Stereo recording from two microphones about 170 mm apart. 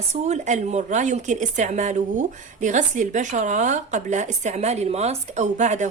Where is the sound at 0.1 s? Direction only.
40° right (ahead or behind).